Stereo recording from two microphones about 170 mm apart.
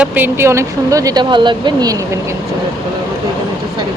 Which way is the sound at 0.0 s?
10° right (ahead or behind).